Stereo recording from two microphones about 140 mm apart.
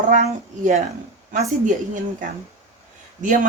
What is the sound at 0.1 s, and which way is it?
A woman's voice, 60° right (ahead or behind).